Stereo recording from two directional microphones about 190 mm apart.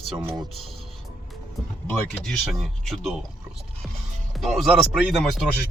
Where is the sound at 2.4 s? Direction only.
Centre (ahead or behind).